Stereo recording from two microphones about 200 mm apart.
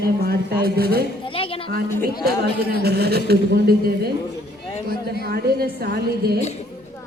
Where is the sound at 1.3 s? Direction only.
25° left (ahead or behind).